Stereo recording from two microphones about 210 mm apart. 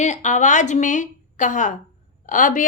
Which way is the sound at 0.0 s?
35° left (ahead or behind).